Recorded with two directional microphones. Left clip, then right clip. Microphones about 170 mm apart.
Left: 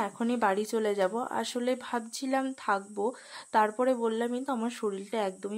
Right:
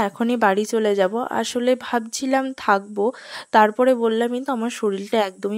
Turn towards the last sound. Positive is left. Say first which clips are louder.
# right 11 dB
turn(degrees=-45)  # may be behind; listen again after turning